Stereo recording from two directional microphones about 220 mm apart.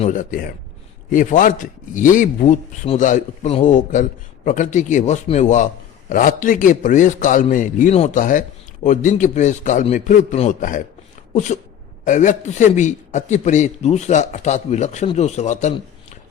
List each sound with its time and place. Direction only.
0.0 s a man's voice: 35° left (ahead or behind)